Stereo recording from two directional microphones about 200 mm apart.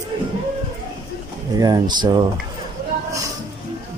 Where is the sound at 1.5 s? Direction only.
20° right (ahead or behind).